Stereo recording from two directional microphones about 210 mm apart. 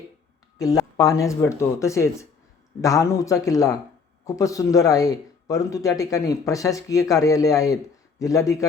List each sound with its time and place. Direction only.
0.6 s speech: 15° left (ahead or behind)